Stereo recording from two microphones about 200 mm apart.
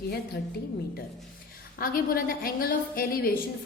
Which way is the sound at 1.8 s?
45° left (ahead or behind).